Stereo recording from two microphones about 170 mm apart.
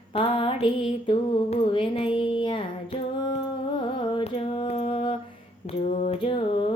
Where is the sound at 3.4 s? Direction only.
30° left (ahead or behind).